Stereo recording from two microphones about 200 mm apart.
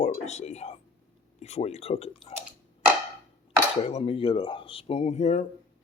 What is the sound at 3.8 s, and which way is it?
Speech, 30° left (ahead or behind).